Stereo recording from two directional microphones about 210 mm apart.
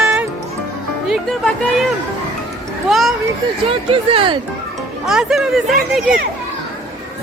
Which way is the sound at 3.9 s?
25° right (ahead or behind).